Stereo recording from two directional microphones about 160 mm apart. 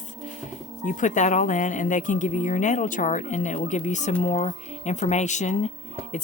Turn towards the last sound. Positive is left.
turn(degrees=50)  # may be behind; listen again after turning